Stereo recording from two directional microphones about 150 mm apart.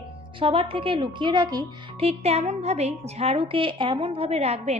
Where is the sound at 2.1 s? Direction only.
45° right (ahead or behind).